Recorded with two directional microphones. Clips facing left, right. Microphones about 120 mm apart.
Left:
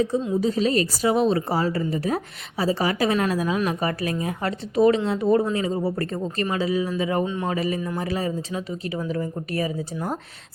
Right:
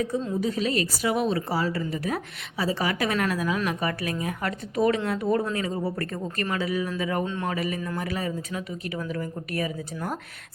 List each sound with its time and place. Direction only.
0.4 s speech: 30° left (ahead or behind)
7.3 s a man's voice: 10° left (ahead or behind)
7.5 s speech: 30° left (ahead or behind)